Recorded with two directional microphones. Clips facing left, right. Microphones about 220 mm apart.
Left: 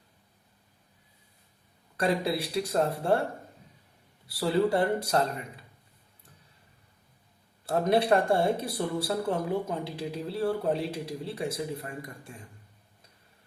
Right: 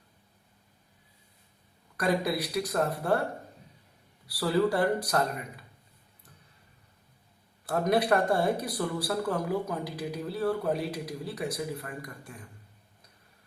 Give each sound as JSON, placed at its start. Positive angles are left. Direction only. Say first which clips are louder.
{"t": 2.0, "sound": "speech", "louder": "even", "side_deg": 30}
{"t": 4.3, "sound": "speech", "louder": "left 1 dB", "side_deg": 25}
{"t": 7.7, "sound": "speech", "louder": "left 1 dB", "side_deg": 25}